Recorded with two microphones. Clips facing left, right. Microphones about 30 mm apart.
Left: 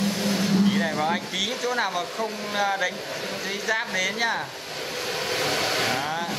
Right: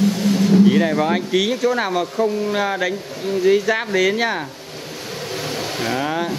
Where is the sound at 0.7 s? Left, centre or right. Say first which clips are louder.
Right 7 dB; centre.